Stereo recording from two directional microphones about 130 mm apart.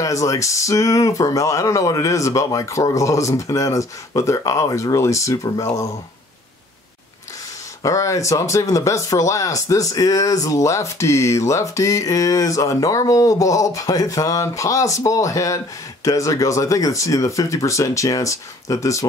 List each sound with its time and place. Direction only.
0.0 s speech: 25° left (ahead or behind)
7.8 s speech: 25° left (ahead or behind)